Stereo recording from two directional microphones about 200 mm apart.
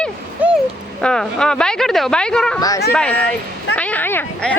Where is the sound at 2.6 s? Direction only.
20° left (ahead or behind).